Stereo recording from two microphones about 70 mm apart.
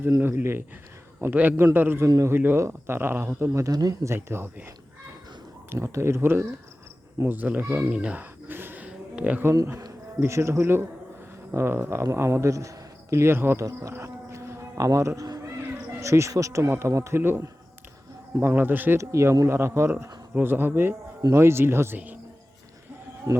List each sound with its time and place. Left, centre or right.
0.0 s speech: right
3.5 s speech: right
4.0 s speech: right
5.7 s speech: right
7.3 s speech: right
8.2 s a sound: right
8.9 s a sound: centre
10.2 s a man's voice: right
13.6 s speech: right
13.9 s a sound: right
16.0 s speech: right
18.9 s speech: right
21.9 s speech: right
23.3 s speech: right